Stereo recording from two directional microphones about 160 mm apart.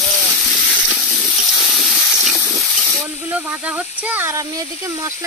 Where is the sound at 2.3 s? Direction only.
15° right (ahead or behind).